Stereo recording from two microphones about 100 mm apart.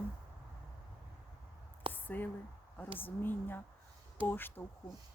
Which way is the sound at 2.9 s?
20° left (ahead or behind).